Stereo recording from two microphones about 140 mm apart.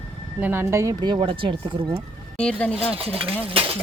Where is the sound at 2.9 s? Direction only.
45° right (ahead or behind).